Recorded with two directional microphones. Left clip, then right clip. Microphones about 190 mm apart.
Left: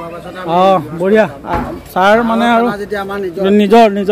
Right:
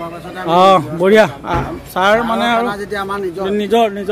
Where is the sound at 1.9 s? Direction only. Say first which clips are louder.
Left 3 dB; 20° left (ahead or behind).